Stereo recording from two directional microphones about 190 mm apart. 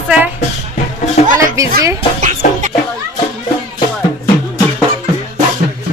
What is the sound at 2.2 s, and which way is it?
Music, 40° right (ahead or behind).